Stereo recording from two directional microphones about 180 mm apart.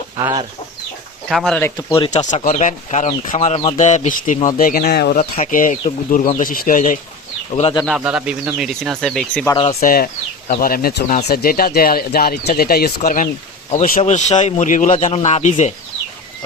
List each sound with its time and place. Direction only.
0.2 s chicken: 20° right (ahead or behind)
1.3 s speech: centre (ahead or behind)
1.9 s speech: 35° left (ahead or behind); by 5.2 s 60° left (ahead or behind)
5.2 s speech: 45° left (ahead or behind)
7.5 s speech: 30° left (ahead or behind)
7.9 s speech: 5° right (ahead or behind)
9.8 s speech: 55° left (ahead or behind); by 15.7 s 40° left (ahead or behind)